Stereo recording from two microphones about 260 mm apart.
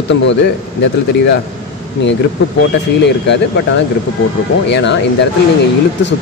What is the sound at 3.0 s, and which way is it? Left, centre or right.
Speech, left.